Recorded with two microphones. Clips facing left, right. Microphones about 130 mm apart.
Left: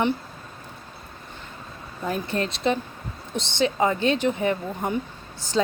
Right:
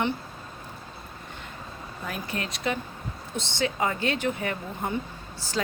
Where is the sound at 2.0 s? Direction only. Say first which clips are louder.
Left 7 dB; 30° left (ahead or behind).